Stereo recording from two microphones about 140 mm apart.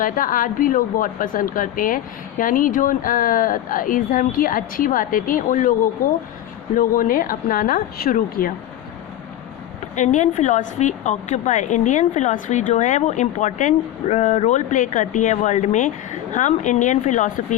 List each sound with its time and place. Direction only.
0.0 s speech: 75° left (ahead or behind)
6.7 s a woman's voice: 80° left
9.9 s a woman's voice: 60° left (ahead or behind)